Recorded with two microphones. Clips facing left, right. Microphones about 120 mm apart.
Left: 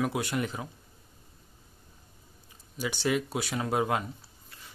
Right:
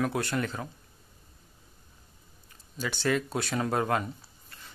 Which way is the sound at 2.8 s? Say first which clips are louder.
Even; 15° left (ahead or behind).